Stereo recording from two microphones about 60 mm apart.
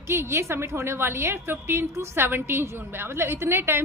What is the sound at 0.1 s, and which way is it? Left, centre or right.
A woman's voice, right.